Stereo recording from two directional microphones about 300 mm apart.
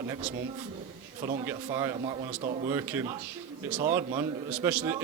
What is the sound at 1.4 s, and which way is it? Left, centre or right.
A man's voice, centre.